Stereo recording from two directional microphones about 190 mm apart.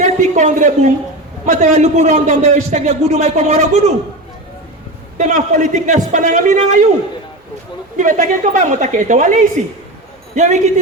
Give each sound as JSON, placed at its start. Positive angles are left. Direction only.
{"t": 0.0, "sound": "a man's voice", "side_deg": -40}
{"t": 5.1, "sound": "a man's voice", "side_deg": -40}
{"t": 7.9, "sound": "a man's voice", "side_deg": -40}